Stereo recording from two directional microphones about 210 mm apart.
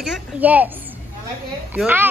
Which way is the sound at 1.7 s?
10° right (ahead or behind).